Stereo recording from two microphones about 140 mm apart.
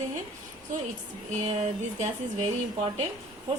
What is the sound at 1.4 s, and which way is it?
Speech, 50° right (ahead or behind).